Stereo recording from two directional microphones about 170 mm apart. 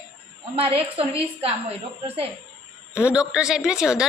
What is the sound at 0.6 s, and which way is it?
A woman's voice, 35° right (ahead or behind).